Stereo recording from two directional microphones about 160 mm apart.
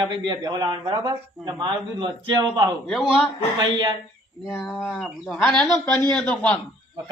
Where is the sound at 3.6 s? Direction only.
25° right (ahead or behind).